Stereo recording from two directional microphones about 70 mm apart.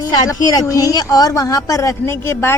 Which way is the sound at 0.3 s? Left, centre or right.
Left.